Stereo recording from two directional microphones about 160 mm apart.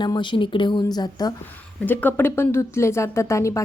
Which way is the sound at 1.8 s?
10° left (ahead or behind).